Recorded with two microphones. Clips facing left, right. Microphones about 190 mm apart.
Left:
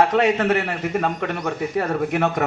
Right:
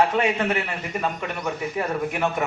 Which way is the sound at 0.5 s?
60° left (ahead or behind).